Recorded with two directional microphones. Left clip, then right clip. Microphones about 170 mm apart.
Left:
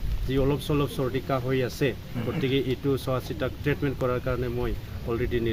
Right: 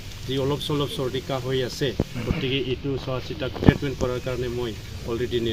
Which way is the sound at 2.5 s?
90° left.